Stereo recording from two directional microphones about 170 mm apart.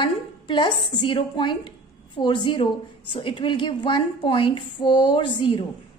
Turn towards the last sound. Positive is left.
turn(degrees=30)  # may be behind; listen again after turning